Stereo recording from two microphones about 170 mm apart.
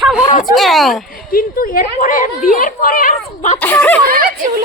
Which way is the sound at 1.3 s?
60° left (ahead or behind).